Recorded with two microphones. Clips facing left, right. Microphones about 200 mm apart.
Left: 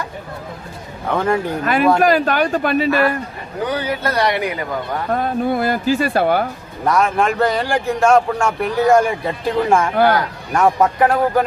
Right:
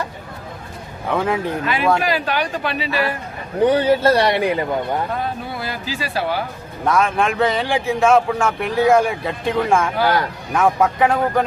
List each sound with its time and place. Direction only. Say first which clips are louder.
1.1 s speech: left 2 dB; 5° right (ahead or behind)
1.6 s speech: left 6 dB; 50° left (ahead or behind)
3.6 s a man's voice: right 7 dB; 30° right (ahead or behind)
5.1 s speech: left 7 dB; 55° left (ahead or behind)
6.8 s speech: left 1 dB; centre (ahead or behind)